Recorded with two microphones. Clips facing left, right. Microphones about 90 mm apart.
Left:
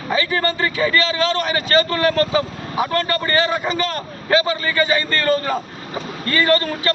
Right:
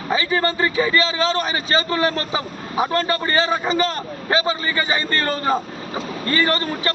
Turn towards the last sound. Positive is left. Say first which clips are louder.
# left 3 dB
turn(degrees=-25)  # may be behind; listen again after turning